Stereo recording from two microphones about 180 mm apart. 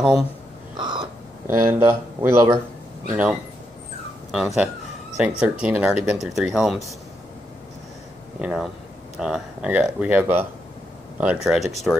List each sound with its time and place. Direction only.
0.7 s crow: 25° right (ahead or behind)
1.5 s speech: 15° right (ahead or behind)
8.4 s speech: 5° right (ahead or behind)